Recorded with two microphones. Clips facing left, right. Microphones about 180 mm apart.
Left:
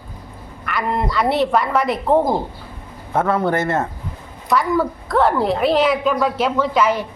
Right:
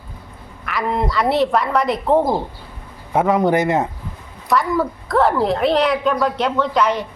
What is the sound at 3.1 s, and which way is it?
Speech, 15° right (ahead or behind).